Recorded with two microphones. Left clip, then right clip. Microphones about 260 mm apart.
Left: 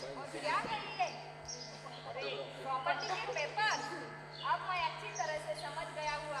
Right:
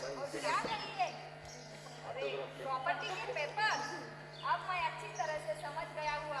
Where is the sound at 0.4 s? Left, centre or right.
Centre.